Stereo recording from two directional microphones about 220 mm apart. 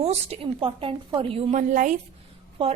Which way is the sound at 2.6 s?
25° right (ahead or behind).